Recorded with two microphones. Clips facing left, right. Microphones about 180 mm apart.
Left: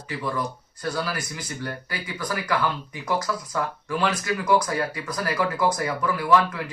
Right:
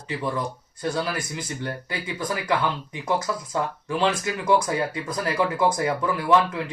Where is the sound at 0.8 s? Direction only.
25° right (ahead or behind).